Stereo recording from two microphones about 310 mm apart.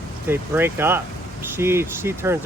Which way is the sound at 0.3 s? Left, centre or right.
Centre.